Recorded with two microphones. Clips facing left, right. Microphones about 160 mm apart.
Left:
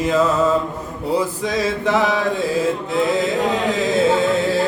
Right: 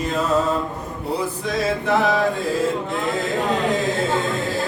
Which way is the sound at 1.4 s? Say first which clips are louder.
Left 2 dB; 90° left.